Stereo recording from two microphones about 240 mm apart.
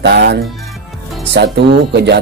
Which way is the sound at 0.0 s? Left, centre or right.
Right.